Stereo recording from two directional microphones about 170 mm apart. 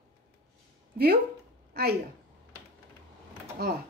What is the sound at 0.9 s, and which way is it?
A woman's voice, 65° right (ahead or behind).